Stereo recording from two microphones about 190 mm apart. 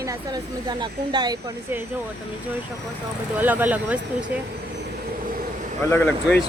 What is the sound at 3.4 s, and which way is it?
Speech, 10° right (ahead or behind).